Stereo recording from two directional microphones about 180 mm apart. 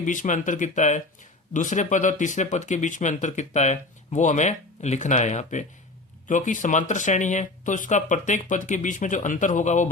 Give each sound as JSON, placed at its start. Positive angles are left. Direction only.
{"t": 0.0, "sound": "speech", "side_deg": 45}